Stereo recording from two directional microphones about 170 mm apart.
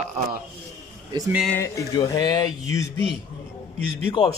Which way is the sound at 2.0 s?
25° left (ahead or behind).